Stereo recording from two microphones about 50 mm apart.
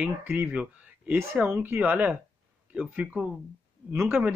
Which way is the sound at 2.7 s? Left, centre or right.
Right.